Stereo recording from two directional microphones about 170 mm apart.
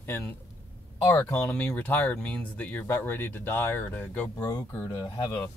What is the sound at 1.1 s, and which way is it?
Speech, 15° left (ahead or behind).